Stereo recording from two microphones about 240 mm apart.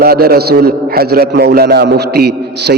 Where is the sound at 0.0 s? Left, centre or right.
Right.